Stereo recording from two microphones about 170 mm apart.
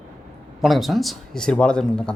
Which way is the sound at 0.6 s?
Centre (ahead or behind).